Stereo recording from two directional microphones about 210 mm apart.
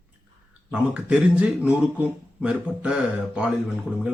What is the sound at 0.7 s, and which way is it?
Speech, 5° right (ahead or behind).